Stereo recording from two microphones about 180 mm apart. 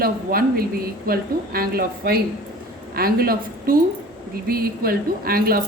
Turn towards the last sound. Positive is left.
turn(degrees=-55)  # may be behind; listen again after turning